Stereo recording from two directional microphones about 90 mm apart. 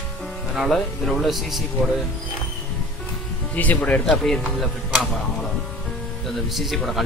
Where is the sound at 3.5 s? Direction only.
15° left (ahead or behind).